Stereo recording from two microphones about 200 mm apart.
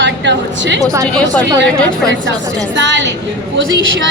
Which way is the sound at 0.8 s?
15° right (ahead or behind).